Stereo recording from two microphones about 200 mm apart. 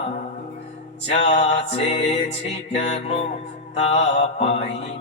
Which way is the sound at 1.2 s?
35° left (ahead or behind).